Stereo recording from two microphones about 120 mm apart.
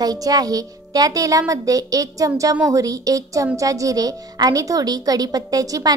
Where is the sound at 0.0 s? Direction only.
30° right (ahead or behind).